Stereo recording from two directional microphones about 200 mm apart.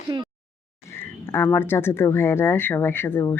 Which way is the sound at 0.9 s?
10° left (ahead or behind).